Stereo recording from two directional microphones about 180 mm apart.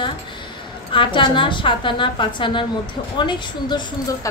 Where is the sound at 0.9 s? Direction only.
25° left (ahead or behind).